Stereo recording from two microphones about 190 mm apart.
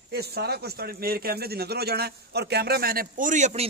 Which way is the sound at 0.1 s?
55° right (ahead or behind).